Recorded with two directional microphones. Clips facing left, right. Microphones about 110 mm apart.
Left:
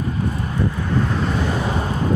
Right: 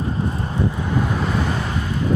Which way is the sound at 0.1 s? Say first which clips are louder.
Even; 30° right (ahead or behind).